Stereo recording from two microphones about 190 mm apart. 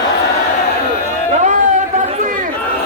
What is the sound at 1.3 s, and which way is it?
Chatter, 40° right (ahead or behind).